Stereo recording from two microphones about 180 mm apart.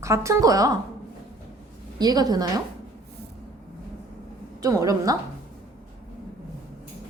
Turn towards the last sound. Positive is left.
turn(degrees=-20)  # may be behind; listen again after turning